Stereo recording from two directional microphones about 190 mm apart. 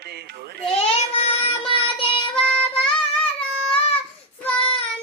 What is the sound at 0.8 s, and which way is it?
Child singing, 30° left (ahead or behind).